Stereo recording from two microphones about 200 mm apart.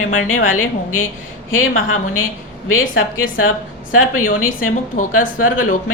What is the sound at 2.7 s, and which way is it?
A woman's voice, 85° left.